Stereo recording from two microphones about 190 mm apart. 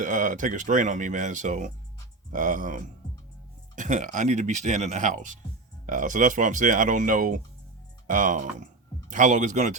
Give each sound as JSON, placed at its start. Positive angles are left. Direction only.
{"t": 0.0, "sound": "speech", "side_deg": -45}